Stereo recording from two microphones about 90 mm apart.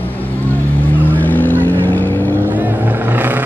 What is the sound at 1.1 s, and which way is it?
Vehicle, 20° left (ahead or behind).